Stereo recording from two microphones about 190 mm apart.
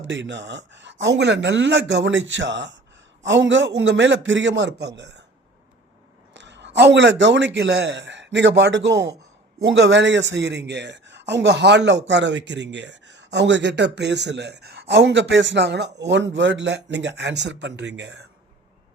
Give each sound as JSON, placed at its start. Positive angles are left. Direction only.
{"t": 0.0, "sound": "a man's voice", "side_deg": -75}
{"t": 6.3, "sound": "a man's voice", "side_deg": -70}